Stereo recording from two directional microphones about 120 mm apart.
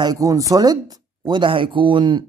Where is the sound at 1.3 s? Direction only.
45° right (ahead or behind).